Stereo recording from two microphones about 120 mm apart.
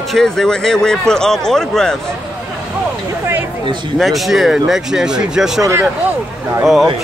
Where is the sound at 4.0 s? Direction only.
Centre (ahead or behind).